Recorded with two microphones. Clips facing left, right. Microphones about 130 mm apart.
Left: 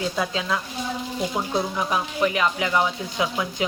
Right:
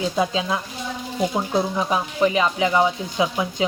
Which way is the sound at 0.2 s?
20° right (ahead or behind).